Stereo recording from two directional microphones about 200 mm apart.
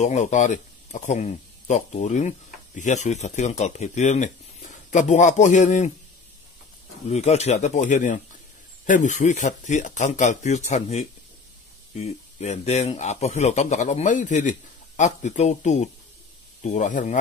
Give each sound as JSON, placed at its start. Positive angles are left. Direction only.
{"t": 0.0, "sound": "speech", "side_deg": 35}
{"t": 7.1, "sound": "speech", "side_deg": 35}